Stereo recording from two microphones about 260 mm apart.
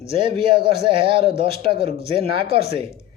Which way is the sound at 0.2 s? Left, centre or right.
Centre.